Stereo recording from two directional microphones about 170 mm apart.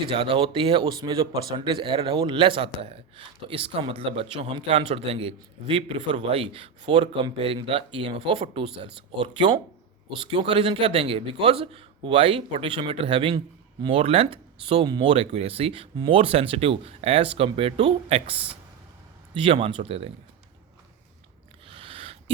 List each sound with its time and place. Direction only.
0.1 s speech: 30° right (ahead or behind)
10.3 s speech: 30° right (ahead or behind)
21.7 s a sound: 30° right (ahead or behind)